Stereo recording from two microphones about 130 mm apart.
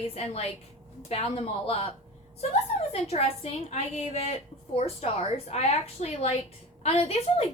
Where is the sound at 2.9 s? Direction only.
50° left (ahead or behind).